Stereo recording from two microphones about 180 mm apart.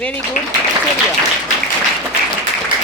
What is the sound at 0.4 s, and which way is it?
Speech, 45° left (ahead or behind).